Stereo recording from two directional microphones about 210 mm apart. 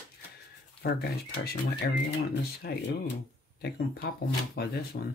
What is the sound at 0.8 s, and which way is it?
Speech, 50° left (ahead or behind).